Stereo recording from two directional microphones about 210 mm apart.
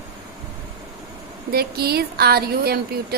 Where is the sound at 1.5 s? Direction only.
50° right (ahead or behind).